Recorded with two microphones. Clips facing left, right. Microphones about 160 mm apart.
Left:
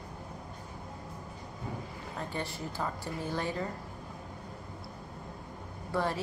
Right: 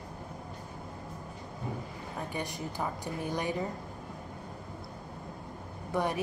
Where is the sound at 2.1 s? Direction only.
15° right (ahead or behind).